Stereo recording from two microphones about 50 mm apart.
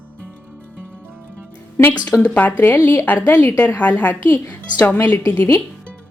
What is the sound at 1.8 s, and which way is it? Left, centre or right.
Speech, left.